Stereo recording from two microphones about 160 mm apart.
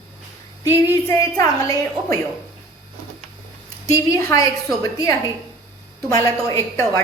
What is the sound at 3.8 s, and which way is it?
A woman's voice, 20° left (ahead or behind).